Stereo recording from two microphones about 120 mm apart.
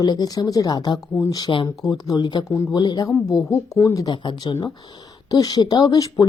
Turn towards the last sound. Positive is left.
turn(degrees=30)  # may be behind; listen again after turning